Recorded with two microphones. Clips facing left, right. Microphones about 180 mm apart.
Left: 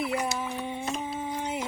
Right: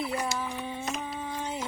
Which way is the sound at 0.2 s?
20° left (ahead or behind).